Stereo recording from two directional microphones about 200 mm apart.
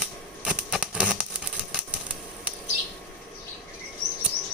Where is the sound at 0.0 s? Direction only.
5° right (ahead or behind).